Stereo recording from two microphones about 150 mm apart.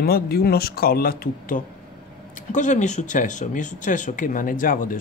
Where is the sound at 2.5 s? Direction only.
55° left (ahead or behind).